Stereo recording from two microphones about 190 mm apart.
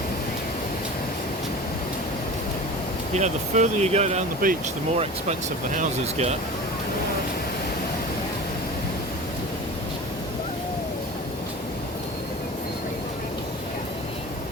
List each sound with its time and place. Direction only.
3.2 s speech: 40° right (ahead or behind)
4.4 s speech: 45° right (ahead or behind)